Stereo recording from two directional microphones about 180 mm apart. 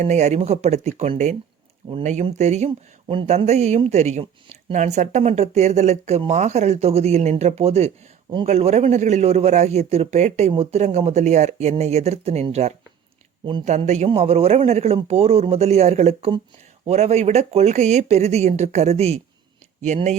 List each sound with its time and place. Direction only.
0.0 s a man's voice: 40° right (ahead or behind)